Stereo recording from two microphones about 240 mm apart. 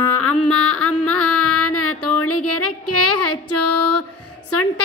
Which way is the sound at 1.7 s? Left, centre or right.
Left.